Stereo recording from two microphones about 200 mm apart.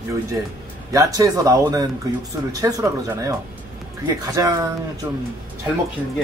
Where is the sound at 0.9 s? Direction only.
15° right (ahead or behind).